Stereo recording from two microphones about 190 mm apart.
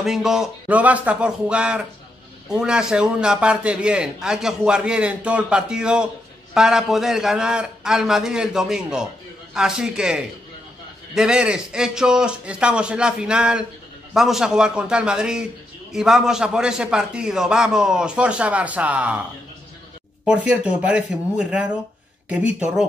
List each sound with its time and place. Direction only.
0.0 s a man's voice: centre (ahead or behind)
20.2 s a man's voice: 5° right (ahead or behind)